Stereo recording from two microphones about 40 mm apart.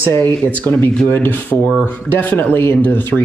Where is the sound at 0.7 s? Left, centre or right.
Left.